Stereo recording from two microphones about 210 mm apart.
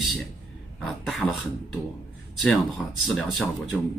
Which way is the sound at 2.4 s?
Centre (ahead or behind).